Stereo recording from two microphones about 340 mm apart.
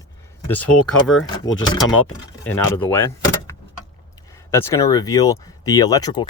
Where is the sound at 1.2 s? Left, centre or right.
Centre.